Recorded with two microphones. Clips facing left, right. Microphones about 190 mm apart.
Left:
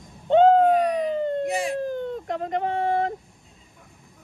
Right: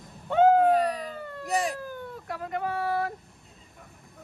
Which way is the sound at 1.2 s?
25° left (ahead or behind).